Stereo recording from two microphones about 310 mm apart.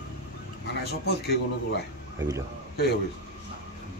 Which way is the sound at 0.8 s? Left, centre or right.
Left.